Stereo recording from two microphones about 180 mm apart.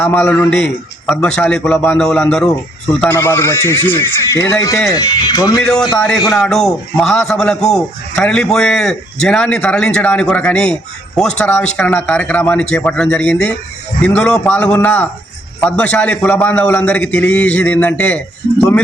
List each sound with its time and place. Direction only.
0.0 s a man's voice: 10° left (ahead or behind)
6.0 s a man's voice: centre (ahead or behind)